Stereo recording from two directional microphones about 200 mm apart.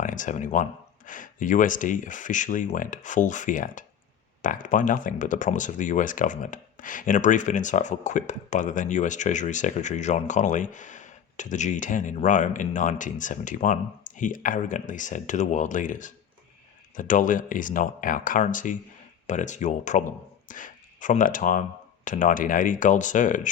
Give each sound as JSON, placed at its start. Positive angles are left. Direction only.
{"t": 0.0, "sound": "speech", "side_deg": 40}